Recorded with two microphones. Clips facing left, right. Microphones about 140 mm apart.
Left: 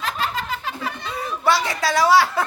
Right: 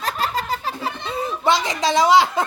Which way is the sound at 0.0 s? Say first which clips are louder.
Right 2 dB; 35° right (ahead or behind).